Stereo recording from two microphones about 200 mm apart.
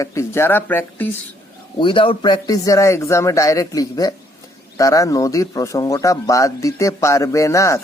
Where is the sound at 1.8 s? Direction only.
25° left (ahead or behind).